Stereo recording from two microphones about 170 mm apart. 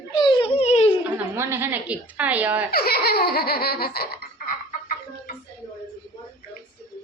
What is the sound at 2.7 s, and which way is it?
Laughter, 65° left (ahead or behind).